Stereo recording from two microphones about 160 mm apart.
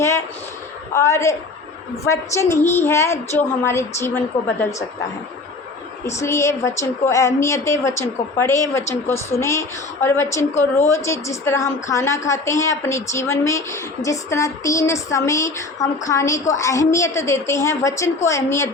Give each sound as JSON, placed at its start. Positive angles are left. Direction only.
{"t": 0.9, "sound": "a woman's voice", "side_deg": 20}
{"t": 6.1, "sound": "a woman's voice", "side_deg": 15}